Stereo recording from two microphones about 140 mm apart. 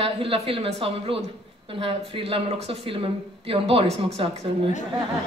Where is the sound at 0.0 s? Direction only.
40° right (ahead or behind).